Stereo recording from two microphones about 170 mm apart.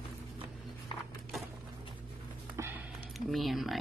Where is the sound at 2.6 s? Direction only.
15° right (ahead or behind).